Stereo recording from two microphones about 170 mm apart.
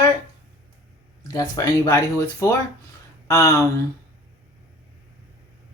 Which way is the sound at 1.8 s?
15° left (ahead or behind).